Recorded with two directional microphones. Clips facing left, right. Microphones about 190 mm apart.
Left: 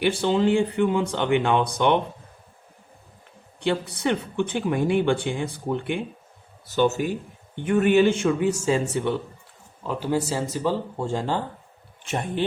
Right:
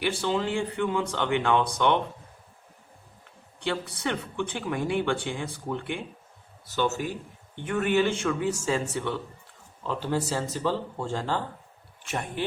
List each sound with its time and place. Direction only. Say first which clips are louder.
0.0 s speech: left 6 dB; 20° left (ahead or behind)
3.6 s speech: left 6 dB; 20° left (ahead or behind)